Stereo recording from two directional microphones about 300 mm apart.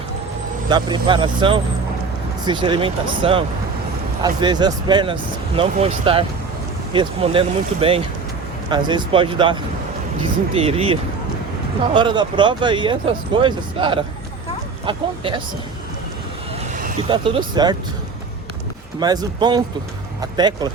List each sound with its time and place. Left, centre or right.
0.7 s speech: centre
11.9 s speech: centre
17.1 s speech: centre
18.9 s speech: centre